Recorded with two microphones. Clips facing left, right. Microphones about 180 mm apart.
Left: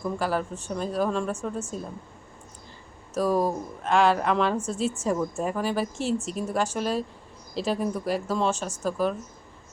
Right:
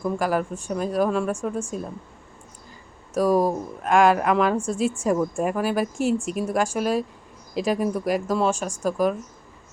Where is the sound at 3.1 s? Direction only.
10° right (ahead or behind).